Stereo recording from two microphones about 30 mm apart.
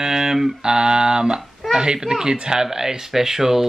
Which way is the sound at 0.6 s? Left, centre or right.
Right.